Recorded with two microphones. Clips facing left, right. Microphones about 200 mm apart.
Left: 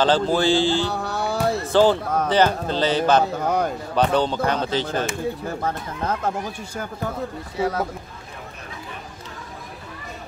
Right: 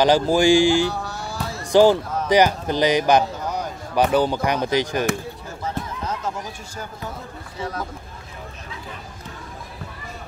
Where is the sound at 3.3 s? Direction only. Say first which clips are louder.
Left 6 dB; 55° left (ahead or behind).